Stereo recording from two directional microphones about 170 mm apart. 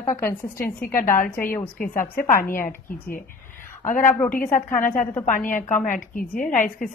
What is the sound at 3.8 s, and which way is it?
A woman's voice, 50° left (ahead or behind).